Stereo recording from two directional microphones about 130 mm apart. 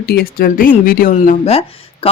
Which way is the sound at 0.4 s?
90° left.